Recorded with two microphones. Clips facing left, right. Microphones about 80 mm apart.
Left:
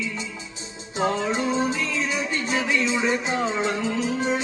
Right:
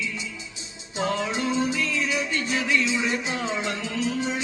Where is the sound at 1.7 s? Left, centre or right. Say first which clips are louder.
Even; left.